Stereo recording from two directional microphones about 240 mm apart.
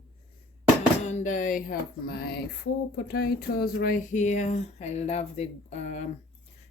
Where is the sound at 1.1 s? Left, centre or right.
Left.